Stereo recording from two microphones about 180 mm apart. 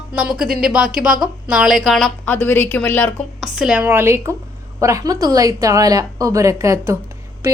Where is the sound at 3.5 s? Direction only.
5° right (ahead or behind).